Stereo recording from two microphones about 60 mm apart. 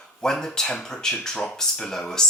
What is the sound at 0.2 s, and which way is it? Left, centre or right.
Speech, centre.